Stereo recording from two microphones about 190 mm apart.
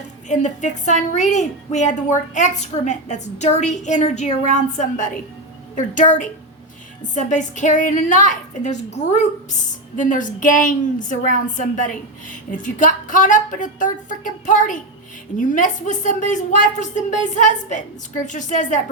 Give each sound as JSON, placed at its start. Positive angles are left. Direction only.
{"t": 0.3, "sound": "a woman's voice", "side_deg": 40}